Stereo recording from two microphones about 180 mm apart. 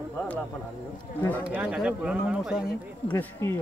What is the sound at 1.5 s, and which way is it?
Speech, 5° right (ahead or behind).